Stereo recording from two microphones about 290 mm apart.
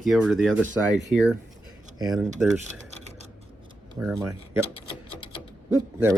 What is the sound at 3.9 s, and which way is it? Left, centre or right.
Speech, centre.